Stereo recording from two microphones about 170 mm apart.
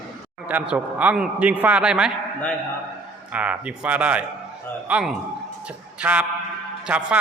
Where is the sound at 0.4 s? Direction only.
10° right (ahead or behind).